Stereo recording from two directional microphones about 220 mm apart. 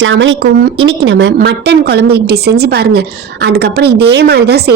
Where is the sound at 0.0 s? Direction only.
55° right (ahead or behind).